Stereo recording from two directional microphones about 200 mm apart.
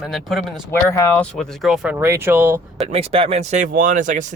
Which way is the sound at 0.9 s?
10° left (ahead or behind).